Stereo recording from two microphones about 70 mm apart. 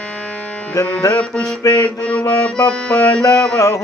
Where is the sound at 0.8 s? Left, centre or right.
Left.